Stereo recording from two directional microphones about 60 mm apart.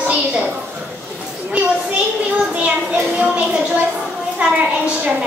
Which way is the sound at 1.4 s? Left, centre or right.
Centre.